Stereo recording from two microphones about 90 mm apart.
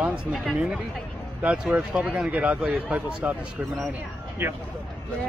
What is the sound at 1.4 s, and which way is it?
Speech, 10° right (ahead or behind).